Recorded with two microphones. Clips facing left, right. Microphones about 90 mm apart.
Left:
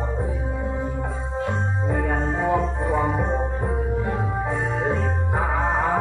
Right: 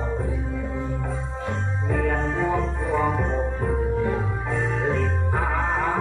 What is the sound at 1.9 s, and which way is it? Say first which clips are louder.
Music: right 1 dB; 20° left (ahead or behind).